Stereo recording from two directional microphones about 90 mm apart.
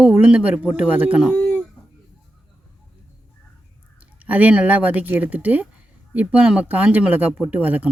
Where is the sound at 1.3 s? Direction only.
10° left (ahead or behind).